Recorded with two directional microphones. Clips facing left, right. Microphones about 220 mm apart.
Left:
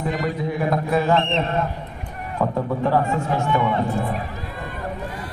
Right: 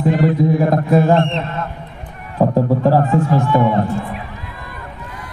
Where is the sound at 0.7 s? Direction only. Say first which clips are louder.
Right 6 dB; 35° right (ahead or behind).